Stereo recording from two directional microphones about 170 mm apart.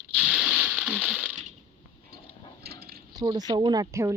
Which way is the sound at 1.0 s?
Centre (ahead or behind).